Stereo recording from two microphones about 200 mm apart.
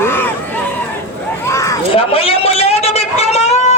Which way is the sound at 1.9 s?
30° left (ahead or behind).